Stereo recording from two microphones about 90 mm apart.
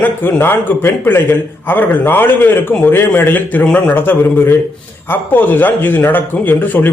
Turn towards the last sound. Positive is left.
turn(degrees=20)  # may be behind; listen again after turning